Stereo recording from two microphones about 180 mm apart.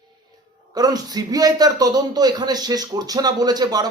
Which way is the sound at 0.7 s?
20° right (ahead or behind).